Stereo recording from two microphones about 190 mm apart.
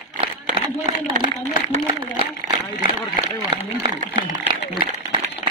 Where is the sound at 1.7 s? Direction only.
25° right (ahead or behind).